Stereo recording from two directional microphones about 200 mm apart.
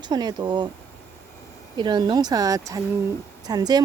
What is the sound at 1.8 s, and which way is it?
Speech, 20° right (ahead or behind).